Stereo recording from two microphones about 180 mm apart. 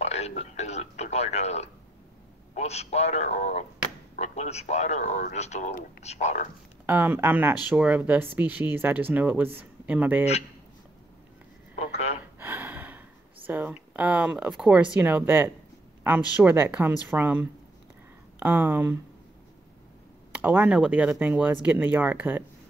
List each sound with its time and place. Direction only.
0.0 s a sound: 35° left (ahead or behind)
2.5 s speech: 35° left (ahead or behind)
6.9 s speech: 10° right (ahead or behind)
12.2 s gasp: 10° right (ahead or behind)
13.5 s speech: 10° right (ahead or behind)
20.3 s speech: 10° right (ahead or behind)